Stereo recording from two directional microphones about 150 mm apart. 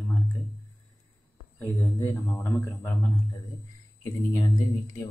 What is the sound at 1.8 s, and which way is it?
Speech, 20° left (ahead or behind).